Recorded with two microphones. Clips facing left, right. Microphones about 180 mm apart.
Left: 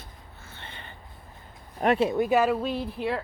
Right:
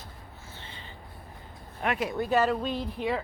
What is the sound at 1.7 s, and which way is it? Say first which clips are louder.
Speech: left 7 dB; 35° left (ahead or behind).